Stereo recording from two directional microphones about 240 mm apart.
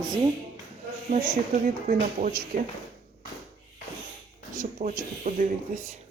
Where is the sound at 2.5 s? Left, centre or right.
Right.